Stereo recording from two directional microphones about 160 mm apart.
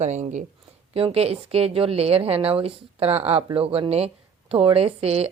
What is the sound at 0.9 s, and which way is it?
A woman's voice, 40° right (ahead or behind).